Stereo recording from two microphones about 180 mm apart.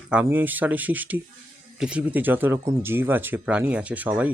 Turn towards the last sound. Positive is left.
turn(degrees=-10)  # may be behind; listen again after turning